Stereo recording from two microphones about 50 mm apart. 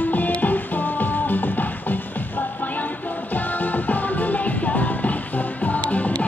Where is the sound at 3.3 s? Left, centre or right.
Left.